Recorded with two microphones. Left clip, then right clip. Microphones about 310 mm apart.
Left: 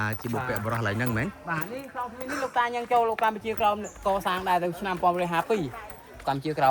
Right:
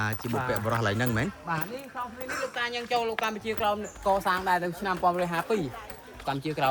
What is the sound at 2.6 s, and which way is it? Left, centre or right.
A man's voice, left.